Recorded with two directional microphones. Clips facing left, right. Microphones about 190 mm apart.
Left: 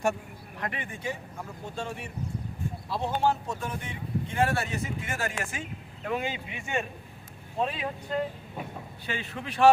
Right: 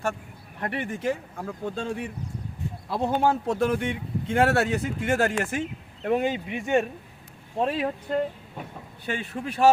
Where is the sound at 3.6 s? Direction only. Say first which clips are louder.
Right 11 dB; 90° right; by 5.3 s 65° right (ahead or behind).